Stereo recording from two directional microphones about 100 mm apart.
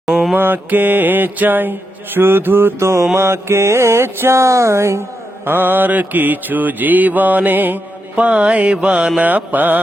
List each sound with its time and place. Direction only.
0.1 s mantra: centre (ahead or behind)
0.3 s mantra: 20° right (ahead or behind)